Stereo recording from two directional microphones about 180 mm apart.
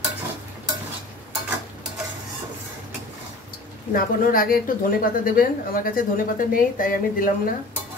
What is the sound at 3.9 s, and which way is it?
Speech, 50° left (ahead or behind).